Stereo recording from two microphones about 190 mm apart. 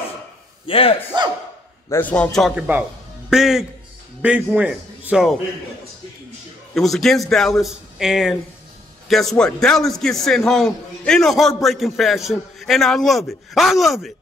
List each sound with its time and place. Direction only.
0.7 s speech: 30° left (ahead or behind)
1.9 s a man's voice: 10° left (ahead or behind)
6.7 s a man's voice: centre (ahead or behind)